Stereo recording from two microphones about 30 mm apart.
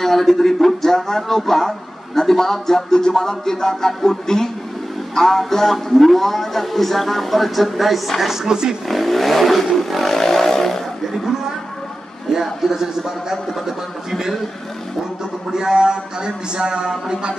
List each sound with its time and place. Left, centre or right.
0.0 s speech: centre
5.1 s music: centre
5.5 s speech: centre
8.5 s speech: right
8.8 s speech: centre
9.8 s vehicle: centre
12.3 s a man's voice: centre
15.5 s speech: right